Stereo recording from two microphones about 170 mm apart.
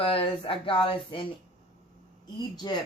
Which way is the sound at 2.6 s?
25° left (ahead or behind).